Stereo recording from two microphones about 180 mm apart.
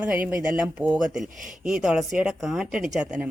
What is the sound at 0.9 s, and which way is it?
Speech, 20° right (ahead or behind).